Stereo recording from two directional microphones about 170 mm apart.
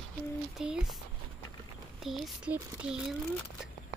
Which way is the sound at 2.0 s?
5° right (ahead or behind).